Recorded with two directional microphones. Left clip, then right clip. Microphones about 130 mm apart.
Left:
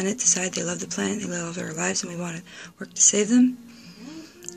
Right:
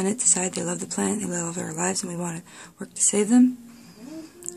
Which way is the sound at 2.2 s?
35° right (ahead or behind).